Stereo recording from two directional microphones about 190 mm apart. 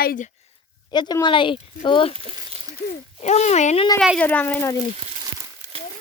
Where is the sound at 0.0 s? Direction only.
50° left (ahead or behind).